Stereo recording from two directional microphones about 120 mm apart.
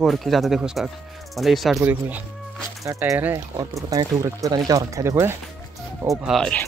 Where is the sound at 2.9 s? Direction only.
25° right (ahead or behind).